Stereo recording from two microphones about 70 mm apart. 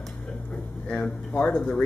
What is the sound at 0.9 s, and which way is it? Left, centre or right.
Speech, centre.